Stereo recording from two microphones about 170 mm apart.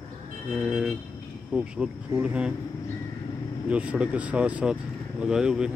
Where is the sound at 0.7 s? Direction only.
5° right (ahead or behind).